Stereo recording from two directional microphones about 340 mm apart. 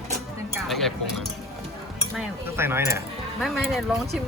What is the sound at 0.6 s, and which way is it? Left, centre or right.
Speech, centre.